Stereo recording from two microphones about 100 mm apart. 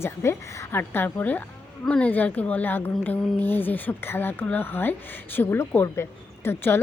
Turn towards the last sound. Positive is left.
turn(degrees=25)  # may be behind; listen again after turning